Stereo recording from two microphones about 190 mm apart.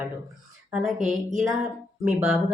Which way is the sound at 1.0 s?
40° right (ahead or behind).